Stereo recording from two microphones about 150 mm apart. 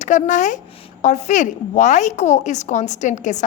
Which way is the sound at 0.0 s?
55° left (ahead or behind).